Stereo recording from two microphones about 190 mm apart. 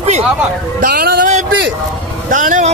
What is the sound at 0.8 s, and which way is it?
Speech, 55° right (ahead or behind).